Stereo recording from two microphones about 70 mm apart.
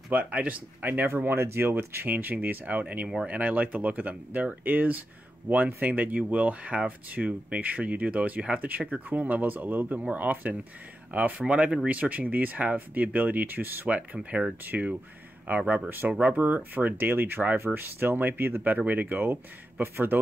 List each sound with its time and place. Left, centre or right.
0.1 s speech: centre
13.9 s speech: centre